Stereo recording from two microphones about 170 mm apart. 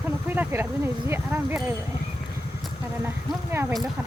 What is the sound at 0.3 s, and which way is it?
Speech, 10° right (ahead or behind).